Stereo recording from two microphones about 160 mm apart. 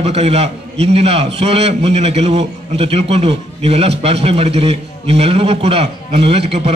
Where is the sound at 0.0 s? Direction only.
40° right (ahead or behind).